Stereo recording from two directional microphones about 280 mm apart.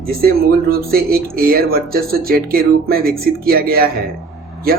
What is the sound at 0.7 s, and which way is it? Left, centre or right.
Speech, right.